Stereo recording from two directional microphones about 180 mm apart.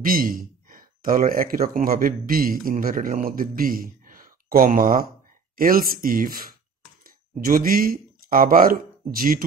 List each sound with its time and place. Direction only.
0.0 s speech: 50° right (ahead or behind)